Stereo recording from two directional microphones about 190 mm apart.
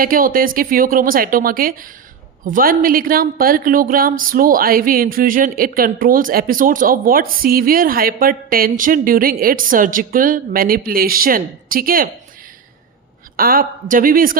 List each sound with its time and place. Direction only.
0.0 s speech: 50° right (ahead or behind)
13.3 s speech: 50° right (ahead or behind)